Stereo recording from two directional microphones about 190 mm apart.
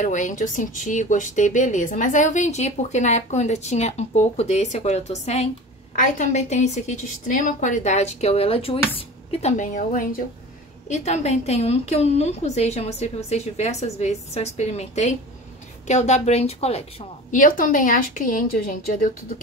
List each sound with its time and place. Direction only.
0.0 s speech: 40° left (ahead or behind)
17.3 s speech: 45° left (ahead or behind)